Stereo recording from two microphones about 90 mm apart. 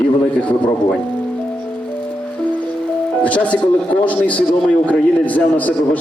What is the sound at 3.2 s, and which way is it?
A man's voice, 15° left (ahead or behind).